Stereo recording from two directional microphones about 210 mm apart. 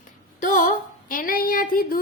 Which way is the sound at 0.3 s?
40° left (ahead or behind).